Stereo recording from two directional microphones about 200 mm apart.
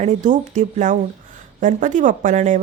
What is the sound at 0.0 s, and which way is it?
Speech, 40° right (ahead or behind).